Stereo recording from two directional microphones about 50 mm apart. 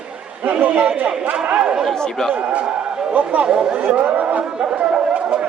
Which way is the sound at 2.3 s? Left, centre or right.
Right.